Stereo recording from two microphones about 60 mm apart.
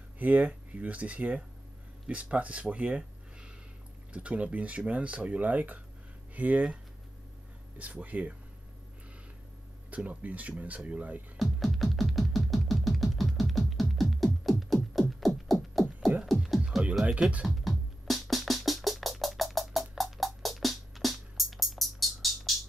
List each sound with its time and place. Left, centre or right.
0.2 s speech: right
9.8 s speech: right
11.3 s music: centre
17.0 s music: right
17.5 s music: centre